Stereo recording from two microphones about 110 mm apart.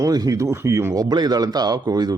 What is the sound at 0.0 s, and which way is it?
Speech, 35° right (ahead or behind).